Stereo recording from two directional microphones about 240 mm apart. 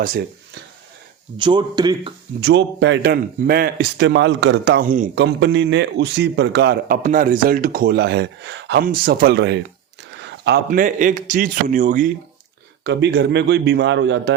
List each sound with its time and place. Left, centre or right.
1.4 s speech: centre
2.4 s a man's voice: right
5.2 s a man's voice: right
12.8 s a man's voice: right